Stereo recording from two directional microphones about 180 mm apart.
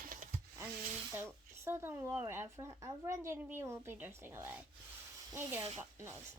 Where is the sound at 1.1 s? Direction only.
15° right (ahead or behind).